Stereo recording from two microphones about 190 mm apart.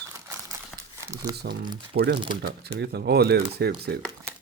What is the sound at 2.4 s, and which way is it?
Speech, 60° right (ahead or behind).